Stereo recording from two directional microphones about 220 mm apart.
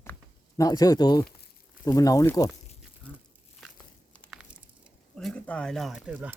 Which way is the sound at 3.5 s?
5° left (ahead or behind).